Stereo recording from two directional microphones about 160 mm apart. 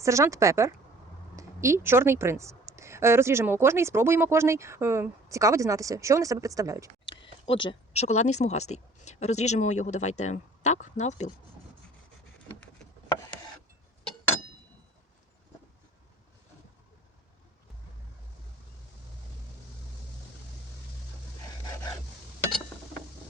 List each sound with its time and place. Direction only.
0.0 s a woman's voice: 20° right (ahead or behind)
7.1 s speech: 30° left (ahead or behind)